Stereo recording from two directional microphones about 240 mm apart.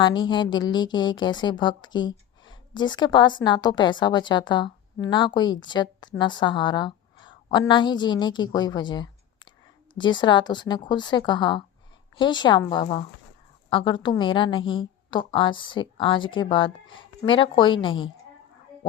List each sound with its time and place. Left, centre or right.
0.0 s speech: centre